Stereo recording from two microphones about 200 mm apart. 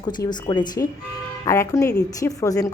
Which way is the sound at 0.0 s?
20° left (ahead or behind).